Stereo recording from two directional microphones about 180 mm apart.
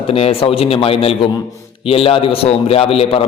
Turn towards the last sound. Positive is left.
turn(degrees=30)  # may be behind; listen again after turning